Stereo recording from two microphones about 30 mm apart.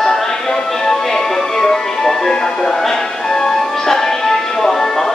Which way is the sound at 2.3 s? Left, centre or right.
Centre.